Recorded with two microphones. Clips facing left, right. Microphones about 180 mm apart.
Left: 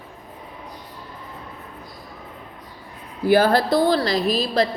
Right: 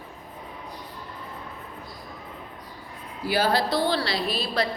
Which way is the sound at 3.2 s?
50° left (ahead or behind).